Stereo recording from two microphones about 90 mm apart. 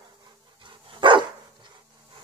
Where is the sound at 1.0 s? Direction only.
65° right (ahead or behind).